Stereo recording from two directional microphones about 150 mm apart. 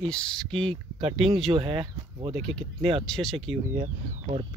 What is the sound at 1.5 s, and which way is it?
Speech, 35° right (ahead or behind).